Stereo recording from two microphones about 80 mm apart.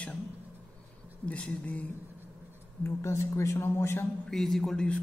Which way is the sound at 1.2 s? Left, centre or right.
Centre.